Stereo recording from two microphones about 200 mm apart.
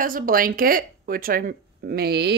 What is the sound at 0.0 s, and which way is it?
Speech, 45° right (ahead or behind).